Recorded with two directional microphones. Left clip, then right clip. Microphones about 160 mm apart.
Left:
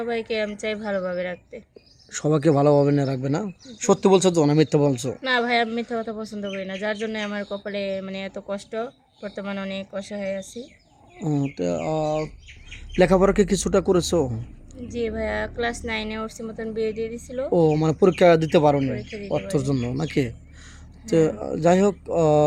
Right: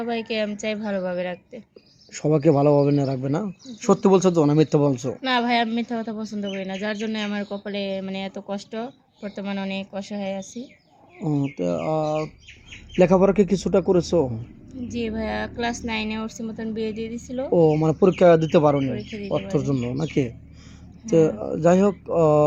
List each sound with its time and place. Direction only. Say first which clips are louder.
0.0 s a woman's voice: even; 15° left (ahead or behind)
11.6 s a woman's voice: right 1 dB; 20° left (ahead or behind)